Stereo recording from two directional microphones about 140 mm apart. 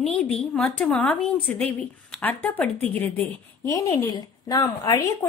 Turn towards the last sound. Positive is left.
turn(degrees=25)  # may be behind; listen again after turning